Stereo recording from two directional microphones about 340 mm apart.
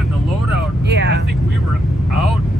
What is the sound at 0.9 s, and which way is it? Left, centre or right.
Speech, right.